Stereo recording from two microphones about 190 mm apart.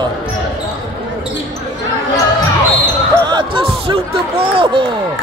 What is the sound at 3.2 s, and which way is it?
Speech, 25° right (ahead or behind).